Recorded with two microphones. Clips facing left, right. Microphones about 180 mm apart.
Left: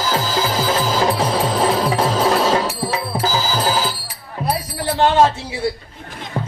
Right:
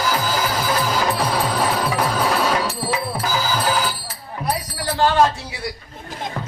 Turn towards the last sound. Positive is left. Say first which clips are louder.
# left 2 dB
turn(degrees=20)  # may be behind; listen again after turning